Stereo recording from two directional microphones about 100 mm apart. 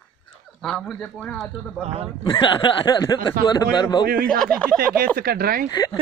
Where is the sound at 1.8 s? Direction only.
90° right.